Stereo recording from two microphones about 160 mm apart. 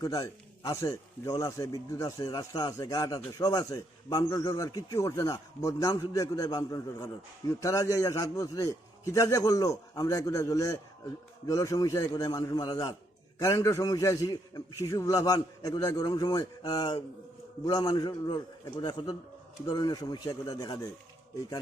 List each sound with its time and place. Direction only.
0.0 s a man's voice: 20° left (ahead or behind)